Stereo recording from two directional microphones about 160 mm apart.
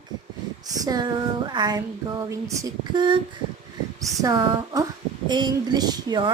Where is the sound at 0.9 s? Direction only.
25° right (ahead or behind).